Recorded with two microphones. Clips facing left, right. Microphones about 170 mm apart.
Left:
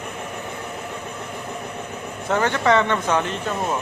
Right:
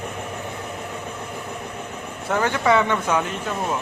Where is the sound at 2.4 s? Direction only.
10° right (ahead or behind).